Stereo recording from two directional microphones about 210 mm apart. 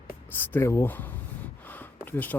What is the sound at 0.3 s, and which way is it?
Speech, 10° left (ahead or behind).